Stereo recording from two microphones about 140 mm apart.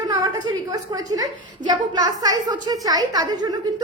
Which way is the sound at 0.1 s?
30° right (ahead or behind).